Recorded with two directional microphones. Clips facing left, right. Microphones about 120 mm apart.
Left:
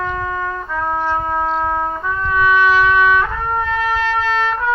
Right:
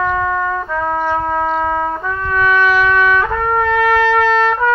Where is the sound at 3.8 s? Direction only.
90° right.